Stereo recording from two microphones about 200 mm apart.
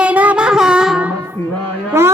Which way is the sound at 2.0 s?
15° right (ahead or behind).